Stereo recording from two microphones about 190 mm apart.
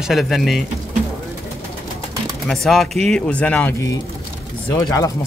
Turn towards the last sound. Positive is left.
turn(degrees=20)  # may be behind; listen again after turning